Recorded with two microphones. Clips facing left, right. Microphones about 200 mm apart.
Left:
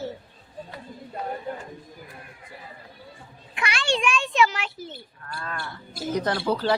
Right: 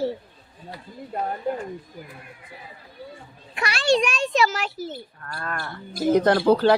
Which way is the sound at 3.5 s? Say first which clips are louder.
Right 6 dB; 40° right (ahead or behind).